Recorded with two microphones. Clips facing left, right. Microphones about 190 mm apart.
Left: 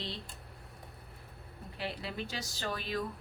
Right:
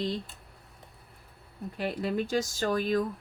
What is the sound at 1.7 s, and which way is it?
Speech, 45° right (ahead or behind).